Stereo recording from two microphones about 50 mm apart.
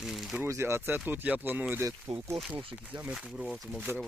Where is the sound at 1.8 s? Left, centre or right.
Right.